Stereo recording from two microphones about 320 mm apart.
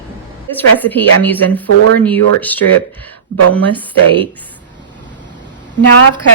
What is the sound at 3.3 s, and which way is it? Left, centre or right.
Speech, right.